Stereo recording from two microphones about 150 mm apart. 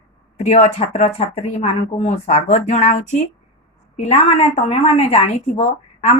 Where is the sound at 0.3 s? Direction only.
45° left (ahead or behind).